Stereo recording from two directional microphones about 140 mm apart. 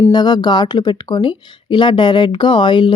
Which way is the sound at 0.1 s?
30° left (ahead or behind).